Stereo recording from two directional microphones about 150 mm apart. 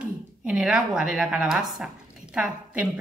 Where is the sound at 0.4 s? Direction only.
5° right (ahead or behind).